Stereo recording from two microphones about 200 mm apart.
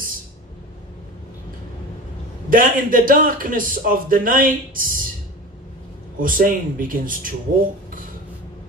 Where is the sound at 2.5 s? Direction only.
45° right (ahead or behind).